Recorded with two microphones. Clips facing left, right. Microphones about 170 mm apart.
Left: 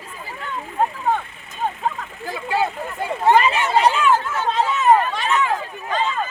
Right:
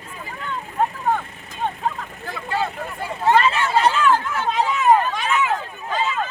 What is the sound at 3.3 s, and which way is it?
Chatter, 15° left (ahead or behind).